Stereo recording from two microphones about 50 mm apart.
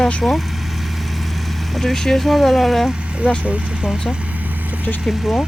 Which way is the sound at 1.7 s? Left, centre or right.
Centre.